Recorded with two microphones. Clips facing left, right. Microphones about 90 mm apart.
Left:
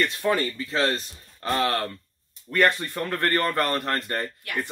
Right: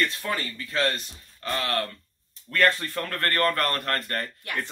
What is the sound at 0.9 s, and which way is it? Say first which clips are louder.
Speech: left 4 dB; 30° left (ahead or behind).